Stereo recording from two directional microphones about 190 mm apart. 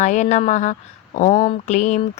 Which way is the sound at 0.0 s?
40° left (ahead or behind).